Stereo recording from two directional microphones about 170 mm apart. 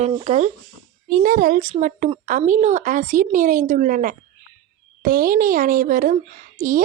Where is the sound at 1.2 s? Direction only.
55° right (ahead or behind).